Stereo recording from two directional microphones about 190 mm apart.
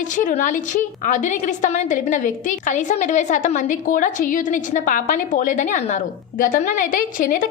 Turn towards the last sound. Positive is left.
turn(degrees=45)  # may be behind; listen again after turning